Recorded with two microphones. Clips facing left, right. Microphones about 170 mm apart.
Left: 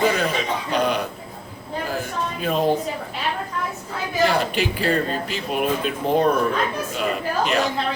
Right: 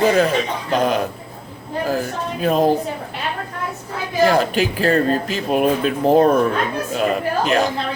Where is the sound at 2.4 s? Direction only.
45° right (ahead or behind).